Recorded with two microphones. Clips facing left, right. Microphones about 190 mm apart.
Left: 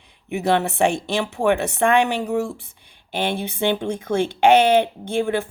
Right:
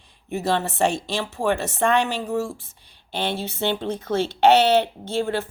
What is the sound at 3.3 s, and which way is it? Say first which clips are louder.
A woman's voice: left 3 dB; 15° left (ahead or behind).